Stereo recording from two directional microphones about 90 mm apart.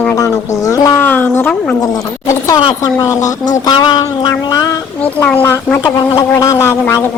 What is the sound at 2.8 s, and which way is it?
Speech, 40° left (ahead or behind).